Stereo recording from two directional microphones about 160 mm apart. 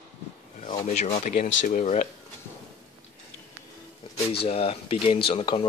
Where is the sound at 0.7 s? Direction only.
50° left (ahead or behind).